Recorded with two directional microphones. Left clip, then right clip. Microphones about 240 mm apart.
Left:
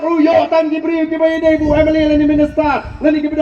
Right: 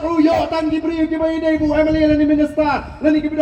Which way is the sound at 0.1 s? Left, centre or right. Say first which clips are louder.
Left 5 dB; left.